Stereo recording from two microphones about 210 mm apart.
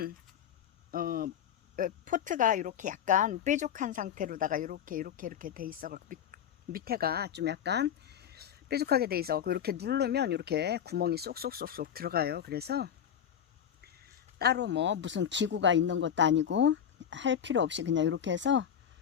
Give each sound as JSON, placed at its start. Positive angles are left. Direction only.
{"t": 0.9, "sound": "speech", "side_deg": -45}
{"t": 14.3, "sound": "speech", "side_deg": -50}